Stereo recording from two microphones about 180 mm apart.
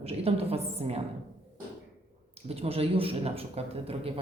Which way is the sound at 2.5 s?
35° right (ahead or behind).